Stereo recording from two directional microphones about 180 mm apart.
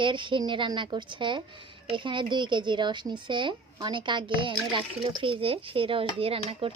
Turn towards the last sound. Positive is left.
turn(degrees=-30)  # may be behind; listen again after turning